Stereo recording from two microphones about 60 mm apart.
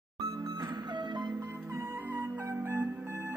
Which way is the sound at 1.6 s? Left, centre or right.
Right.